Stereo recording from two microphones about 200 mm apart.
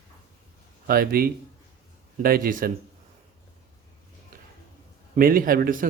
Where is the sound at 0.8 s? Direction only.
50° right (ahead or behind).